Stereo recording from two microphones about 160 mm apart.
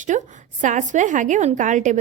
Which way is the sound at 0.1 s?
50° right (ahead or behind).